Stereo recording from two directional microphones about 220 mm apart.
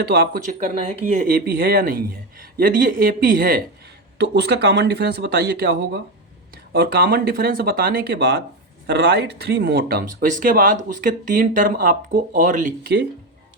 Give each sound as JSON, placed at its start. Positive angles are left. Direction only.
{"t": 0.0, "sound": "speech", "side_deg": -45}